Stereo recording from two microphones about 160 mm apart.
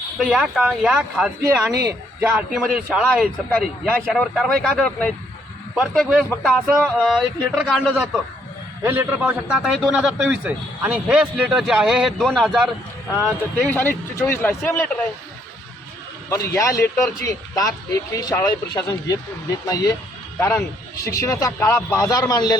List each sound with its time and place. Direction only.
0.2 s a man's voice: 5° right (ahead or behind)
8.8 s a man's voice: 10° right (ahead or behind)
13.2 s speech: 10° left (ahead or behind)
16.5 s speech: 20° left (ahead or behind)